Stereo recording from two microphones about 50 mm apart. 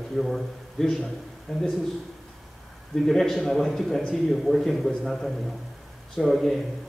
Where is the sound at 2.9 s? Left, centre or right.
Centre.